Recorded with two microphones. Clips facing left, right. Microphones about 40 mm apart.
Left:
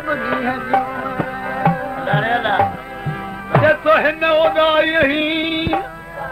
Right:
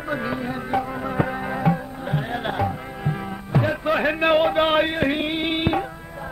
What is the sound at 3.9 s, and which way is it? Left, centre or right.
Music, centre.